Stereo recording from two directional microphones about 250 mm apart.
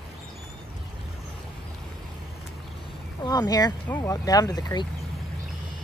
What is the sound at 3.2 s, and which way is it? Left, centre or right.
Speech, centre.